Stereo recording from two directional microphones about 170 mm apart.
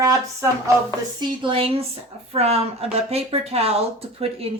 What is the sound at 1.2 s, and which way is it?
Speech, 30° right (ahead or behind).